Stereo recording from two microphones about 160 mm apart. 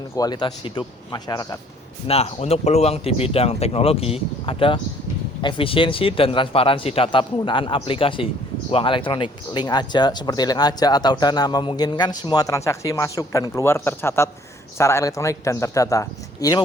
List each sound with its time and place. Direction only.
0.2 s speech: 25° left (ahead or behind)
2.0 s speech: 40° left (ahead or behind); by 16.6 s 20° left (ahead or behind)